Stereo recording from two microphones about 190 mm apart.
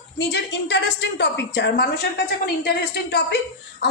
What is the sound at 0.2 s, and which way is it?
A woman's voice, 65° left (ahead or behind).